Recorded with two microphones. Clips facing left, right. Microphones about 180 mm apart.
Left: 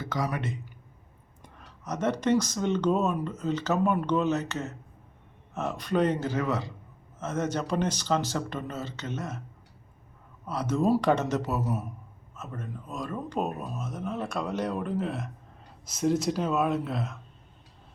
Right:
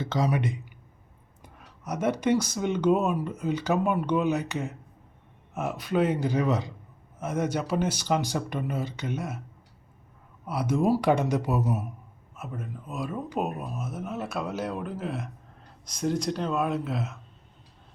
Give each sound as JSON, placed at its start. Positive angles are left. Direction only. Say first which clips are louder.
{"t": 0.0, "sound": "speech", "louder": "right 4 dB", "side_deg": -25}
{"t": 1.4, "sound": "speech", "louder": "even", "side_deg": -5}
{"t": 10.4, "sound": "speech", "louder": "right 1 dB", "side_deg": -10}